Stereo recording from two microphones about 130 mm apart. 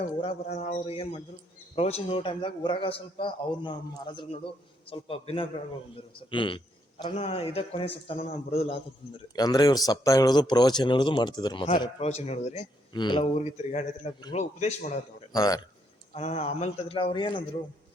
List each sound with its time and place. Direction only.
0.2 s a man's voice: 55° left (ahead or behind)
7.2 s a man's voice: 50° left (ahead or behind)
9.3 s speech: 30° left (ahead or behind)
11.9 s a man's voice: 55° left (ahead or behind)
12.9 s speech: 35° left (ahead or behind)
13.4 s a man's voice: 65° left (ahead or behind)
15.3 s speech: 30° left (ahead or behind)
16.1 s a man's voice: 55° left (ahead or behind); by 17.4 s 35° left (ahead or behind)